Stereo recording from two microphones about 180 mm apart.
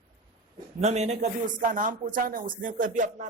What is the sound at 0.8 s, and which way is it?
Speech, 40° right (ahead or behind).